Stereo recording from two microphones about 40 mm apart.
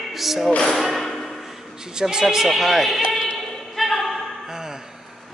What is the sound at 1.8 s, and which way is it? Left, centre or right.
Speech, centre.